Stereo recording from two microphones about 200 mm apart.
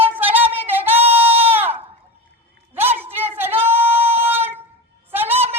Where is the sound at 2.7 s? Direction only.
10° right (ahead or behind).